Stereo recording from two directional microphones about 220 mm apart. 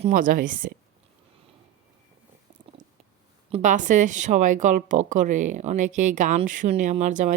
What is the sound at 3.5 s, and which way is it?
A woman's voice, 35° right (ahead or behind).